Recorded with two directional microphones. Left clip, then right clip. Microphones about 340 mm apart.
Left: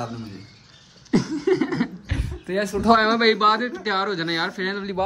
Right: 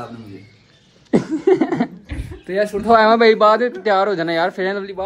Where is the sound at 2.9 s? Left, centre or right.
Centre.